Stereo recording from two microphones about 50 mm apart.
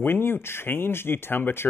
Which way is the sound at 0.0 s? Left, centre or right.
Left.